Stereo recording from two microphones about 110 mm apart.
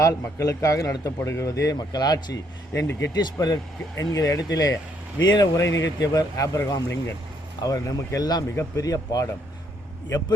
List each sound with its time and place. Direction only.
0.0 s speech: 30° left (ahead or behind)
5.5 s speech: 30° left (ahead or behind)